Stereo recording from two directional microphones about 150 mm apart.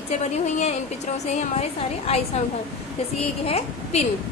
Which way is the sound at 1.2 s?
45° left (ahead or behind).